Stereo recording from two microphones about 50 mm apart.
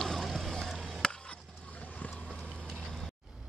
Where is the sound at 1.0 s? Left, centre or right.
Centre.